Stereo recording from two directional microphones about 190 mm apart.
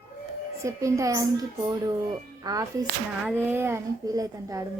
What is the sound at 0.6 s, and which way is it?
A woman's voice, 15° right (ahead or behind).